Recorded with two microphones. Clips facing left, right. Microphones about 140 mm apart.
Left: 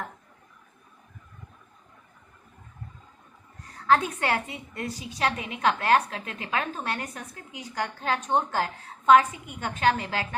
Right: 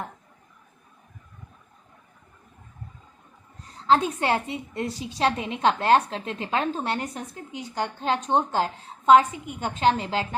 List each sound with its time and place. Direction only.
3.8 s a woman's voice: 25° right (ahead or behind)